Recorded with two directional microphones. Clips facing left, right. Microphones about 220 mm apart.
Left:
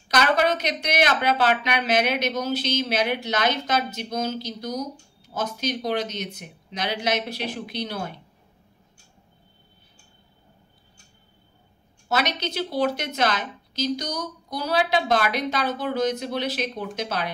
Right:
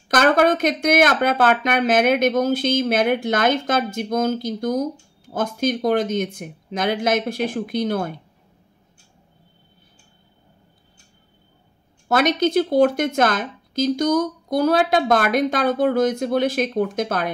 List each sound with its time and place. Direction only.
0.1 s speech: 50° right (ahead or behind)
12.1 s speech: 50° right (ahead or behind)